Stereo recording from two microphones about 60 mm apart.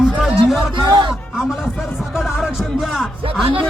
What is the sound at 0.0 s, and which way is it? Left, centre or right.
Music, centre.